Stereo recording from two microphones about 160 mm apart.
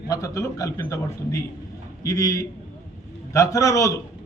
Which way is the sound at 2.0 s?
20° left (ahead or behind).